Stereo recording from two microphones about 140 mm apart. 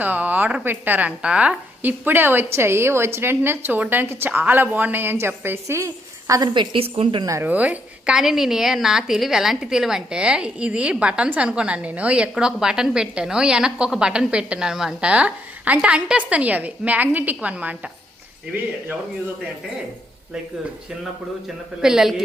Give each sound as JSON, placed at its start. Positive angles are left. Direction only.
{"t": 0.0, "sound": "a woman's voice", "side_deg": -10}
{"t": 6.5, "sound": "a woman's voice", "side_deg": -40}
{"t": 7.3, "sound": "a woman's voice", "side_deg": -15}
{"t": 21.4, "sound": "a man's voice", "side_deg": -5}